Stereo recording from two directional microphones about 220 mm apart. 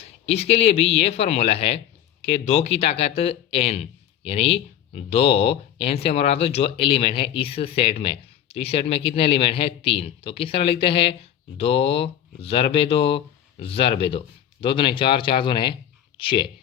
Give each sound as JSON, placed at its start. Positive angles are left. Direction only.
{"t": 0.0, "sound": "speech", "side_deg": 30}